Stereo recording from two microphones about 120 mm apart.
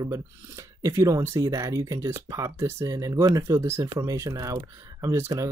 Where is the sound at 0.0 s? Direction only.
25° right (ahead or behind).